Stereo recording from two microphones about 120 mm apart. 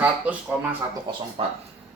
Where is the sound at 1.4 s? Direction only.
50° right (ahead or behind).